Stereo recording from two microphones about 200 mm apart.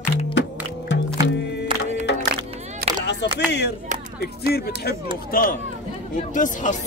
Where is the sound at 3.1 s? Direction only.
60° left (ahead or behind).